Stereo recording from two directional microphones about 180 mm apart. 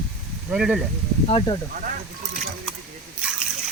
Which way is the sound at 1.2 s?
30° left (ahead or behind).